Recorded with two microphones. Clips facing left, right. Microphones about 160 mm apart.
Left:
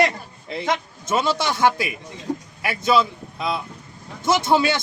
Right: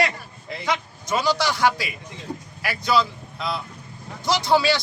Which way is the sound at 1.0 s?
25° left (ahead or behind).